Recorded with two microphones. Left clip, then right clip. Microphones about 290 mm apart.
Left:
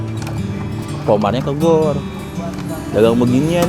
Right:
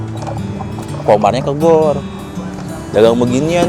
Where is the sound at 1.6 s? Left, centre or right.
Centre.